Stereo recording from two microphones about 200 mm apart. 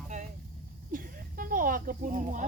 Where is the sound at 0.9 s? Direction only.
45° right (ahead or behind).